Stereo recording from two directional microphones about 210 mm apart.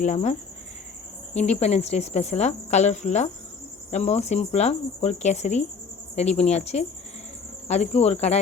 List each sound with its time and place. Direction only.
0.0 s speech: 35° left (ahead or behind)